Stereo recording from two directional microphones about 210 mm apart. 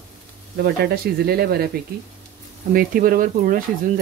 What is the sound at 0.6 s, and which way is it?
Speech, 45° right (ahead or behind).